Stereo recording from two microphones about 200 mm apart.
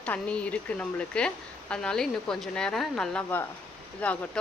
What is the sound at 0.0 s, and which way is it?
A woman's voice, 5° left (ahead or behind).